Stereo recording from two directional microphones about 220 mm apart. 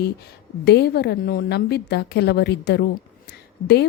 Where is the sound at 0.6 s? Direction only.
50° left (ahead or behind).